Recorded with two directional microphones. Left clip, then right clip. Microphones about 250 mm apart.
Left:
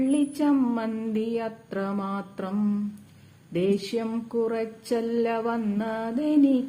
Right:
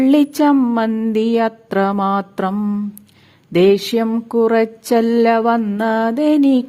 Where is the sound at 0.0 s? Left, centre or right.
Right.